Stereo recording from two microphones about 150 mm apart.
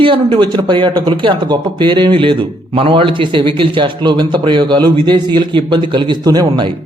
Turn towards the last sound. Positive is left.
turn(degrees=-30)  # may be behind; listen again after turning